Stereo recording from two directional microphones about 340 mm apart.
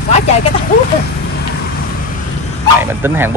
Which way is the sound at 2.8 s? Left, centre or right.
Centre.